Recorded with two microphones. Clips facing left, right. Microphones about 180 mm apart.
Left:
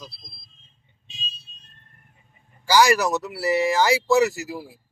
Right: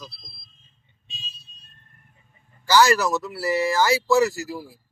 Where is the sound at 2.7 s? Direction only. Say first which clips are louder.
Even; 15° left (ahead or behind).